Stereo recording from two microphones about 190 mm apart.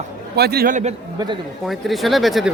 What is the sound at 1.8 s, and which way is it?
Speech, centre (ahead or behind).